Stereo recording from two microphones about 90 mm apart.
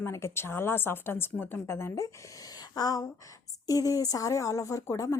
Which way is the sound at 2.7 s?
45° left (ahead or behind).